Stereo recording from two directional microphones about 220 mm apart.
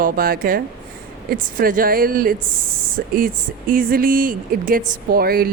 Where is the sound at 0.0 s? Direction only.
40° right (ahead or behind).